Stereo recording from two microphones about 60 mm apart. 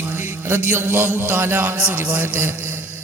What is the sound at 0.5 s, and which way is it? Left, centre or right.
A man's voice, right.